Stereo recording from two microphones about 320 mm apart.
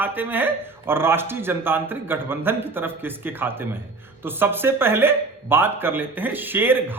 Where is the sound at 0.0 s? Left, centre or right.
Centre.